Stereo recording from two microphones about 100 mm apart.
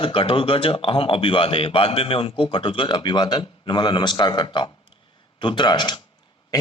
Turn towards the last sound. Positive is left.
turn(degrees=50)  # may be behind; listen again after turning